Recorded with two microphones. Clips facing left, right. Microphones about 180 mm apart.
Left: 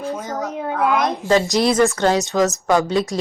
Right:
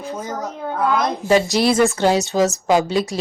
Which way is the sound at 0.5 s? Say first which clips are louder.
Left 1 dB; 5° left (ahead or behind).